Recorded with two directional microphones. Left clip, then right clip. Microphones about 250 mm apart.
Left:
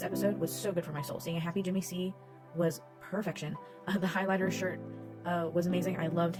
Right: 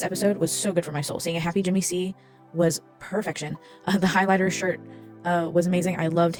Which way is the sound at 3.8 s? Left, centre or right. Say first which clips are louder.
Right 11 dB; right.